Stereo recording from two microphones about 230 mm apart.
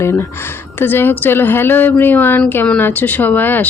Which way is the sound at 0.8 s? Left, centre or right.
Centre.